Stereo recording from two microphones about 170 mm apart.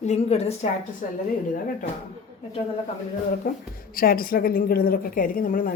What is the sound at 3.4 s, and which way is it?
A woman's voice, 55° left (ahead or behind).